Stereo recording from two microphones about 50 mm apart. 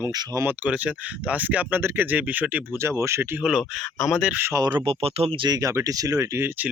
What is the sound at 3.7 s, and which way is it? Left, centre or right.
Speech, centre.